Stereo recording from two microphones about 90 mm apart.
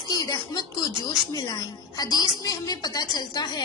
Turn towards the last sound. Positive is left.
turn(degrees=50)  # may be behind; listen again after turning